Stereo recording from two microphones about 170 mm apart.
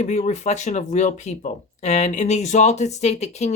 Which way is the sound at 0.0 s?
45° left (ahead or behind).